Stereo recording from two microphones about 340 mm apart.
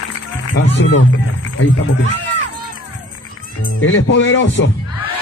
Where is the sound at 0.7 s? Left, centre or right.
Left.